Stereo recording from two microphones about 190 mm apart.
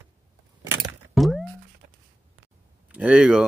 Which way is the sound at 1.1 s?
Centre (ahead or behind).